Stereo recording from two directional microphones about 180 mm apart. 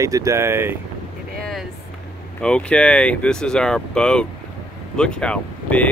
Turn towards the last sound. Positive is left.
turn(degrees=5)  # may be behind; listen again after turning